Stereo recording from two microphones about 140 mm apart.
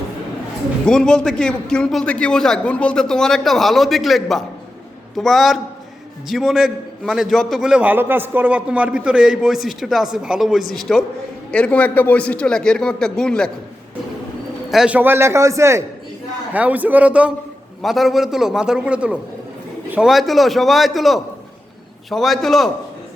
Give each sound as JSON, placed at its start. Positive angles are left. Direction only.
{"t": 0.9, "sound": "a man's voice", "side_deg": 5}
{"t": 14.7, "sound": "a man's voice", "side_deg": -5}